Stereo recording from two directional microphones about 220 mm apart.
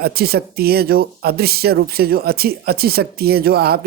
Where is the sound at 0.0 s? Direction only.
45° right (ahead or behind).